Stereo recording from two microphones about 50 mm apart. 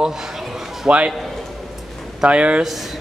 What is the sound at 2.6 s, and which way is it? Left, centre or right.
Speech, centre.